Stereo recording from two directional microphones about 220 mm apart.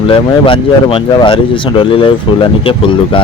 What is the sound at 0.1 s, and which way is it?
Speech, 25° left (ahead or behind).